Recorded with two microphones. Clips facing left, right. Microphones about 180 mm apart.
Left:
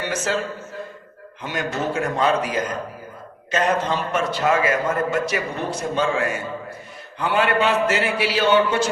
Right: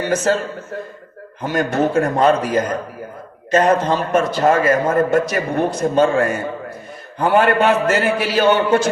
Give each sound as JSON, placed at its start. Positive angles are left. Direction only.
{"t": 1.4, "sound": "a man's voice", "side_deg": -45}